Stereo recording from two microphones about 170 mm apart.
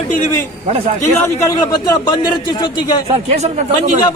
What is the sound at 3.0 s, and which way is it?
Speech, 40° right (ahead or behind).